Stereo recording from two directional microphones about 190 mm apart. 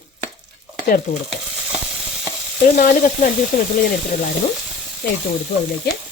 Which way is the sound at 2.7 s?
45° left (ahead or behind).